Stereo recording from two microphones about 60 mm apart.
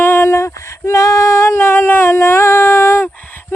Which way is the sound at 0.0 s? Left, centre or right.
Left.